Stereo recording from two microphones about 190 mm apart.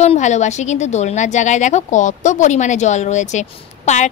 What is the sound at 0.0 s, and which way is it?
A woman's voice, 35° left (ahead or behind).